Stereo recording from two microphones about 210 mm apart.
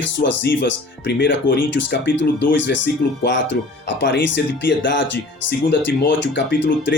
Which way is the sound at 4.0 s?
60° left (ahead or behind).